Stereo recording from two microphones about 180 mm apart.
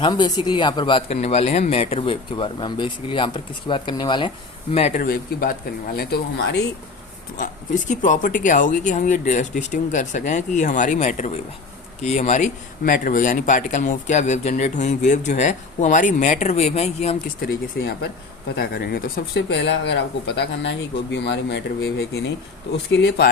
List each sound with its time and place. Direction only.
0.0 s speech: 25° left (ahead or behind)
4.7 s speech: 35° left (ahead or behind)
5.0 s speech: 55° left (ahead or behind)
7.3 s speech: 45° left (ahead or behind)
17.2 s speech: 60° left (ahead or behind)
19.4 s speech: 75° left (ahead or behind)